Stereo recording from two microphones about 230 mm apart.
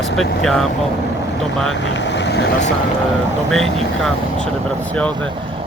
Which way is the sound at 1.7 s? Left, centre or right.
Left.